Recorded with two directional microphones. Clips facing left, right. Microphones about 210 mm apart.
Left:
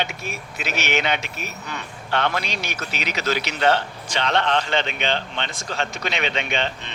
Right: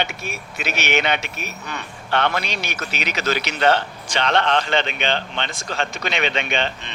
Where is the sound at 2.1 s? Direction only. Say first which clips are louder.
Right 2 dB; 65° right (ahead or behind).